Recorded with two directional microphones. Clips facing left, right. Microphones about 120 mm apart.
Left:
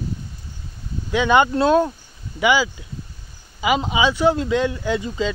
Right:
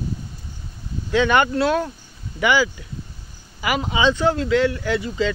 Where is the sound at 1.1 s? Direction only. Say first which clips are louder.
Left 1 dB; 15° left (ahead or behind).